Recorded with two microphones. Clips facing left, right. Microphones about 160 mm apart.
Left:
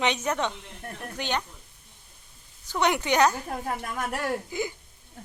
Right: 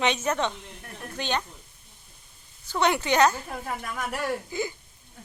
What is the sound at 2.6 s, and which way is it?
A woman's voice, 15° left (ahead or behind).